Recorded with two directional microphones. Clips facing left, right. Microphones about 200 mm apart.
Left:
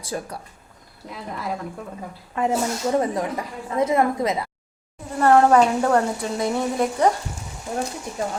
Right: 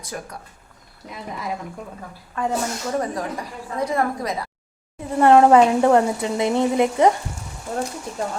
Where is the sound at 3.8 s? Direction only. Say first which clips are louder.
Left 3 dB; 20° left (ahead or behind).